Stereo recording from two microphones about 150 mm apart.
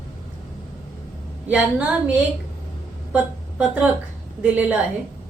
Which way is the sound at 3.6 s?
10° right (ahead or behind).